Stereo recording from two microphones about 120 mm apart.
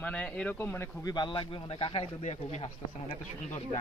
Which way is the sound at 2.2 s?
70° left (ahead or behind).